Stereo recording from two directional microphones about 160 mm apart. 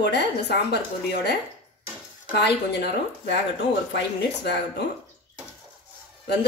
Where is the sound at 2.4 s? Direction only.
90° left.